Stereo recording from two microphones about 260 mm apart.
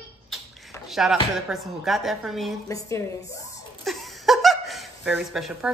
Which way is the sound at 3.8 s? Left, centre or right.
Centre.